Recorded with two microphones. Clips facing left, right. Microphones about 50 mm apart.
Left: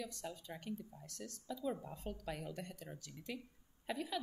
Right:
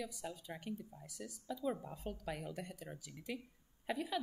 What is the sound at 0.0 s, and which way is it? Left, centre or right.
A woman's voice, centre.